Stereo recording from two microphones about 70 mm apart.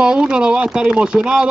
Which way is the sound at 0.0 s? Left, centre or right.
Centre.